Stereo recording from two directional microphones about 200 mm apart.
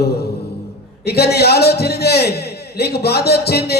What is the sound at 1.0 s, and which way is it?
A man's voice, 55° left (ahead or behind).